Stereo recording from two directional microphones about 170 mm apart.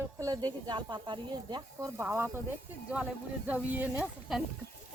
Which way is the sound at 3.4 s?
10° right (ahead or behind).